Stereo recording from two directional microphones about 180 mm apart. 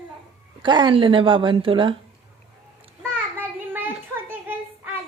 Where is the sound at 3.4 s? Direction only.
10° right (ahead or behind).